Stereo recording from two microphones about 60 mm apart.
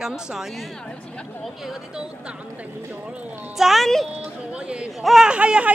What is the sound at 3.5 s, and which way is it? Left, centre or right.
Speech, centre.